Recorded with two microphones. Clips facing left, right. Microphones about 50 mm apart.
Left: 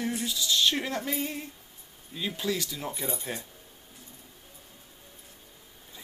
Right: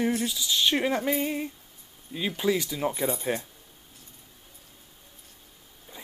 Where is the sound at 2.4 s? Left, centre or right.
Centre.